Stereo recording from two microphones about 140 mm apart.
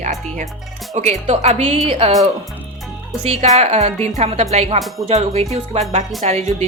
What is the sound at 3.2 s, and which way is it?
A woman's voice, 50° right (ahead or behind).